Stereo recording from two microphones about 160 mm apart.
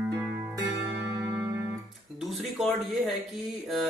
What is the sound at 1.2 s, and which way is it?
Music, 10° right (ahead or behind).